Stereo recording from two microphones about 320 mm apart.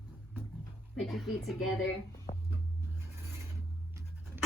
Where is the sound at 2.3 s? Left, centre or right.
Left.